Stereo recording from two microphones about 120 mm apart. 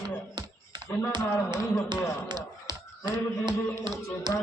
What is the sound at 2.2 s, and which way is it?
Speech, 40° right (ahead or behind).